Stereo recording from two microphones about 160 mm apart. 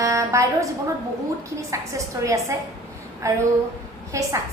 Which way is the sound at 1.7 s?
20° right (ahead or behind).